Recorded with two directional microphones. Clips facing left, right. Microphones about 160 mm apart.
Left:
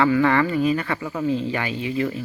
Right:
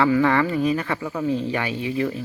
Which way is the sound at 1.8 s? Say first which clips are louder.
Even; 15° right (ahead or behind).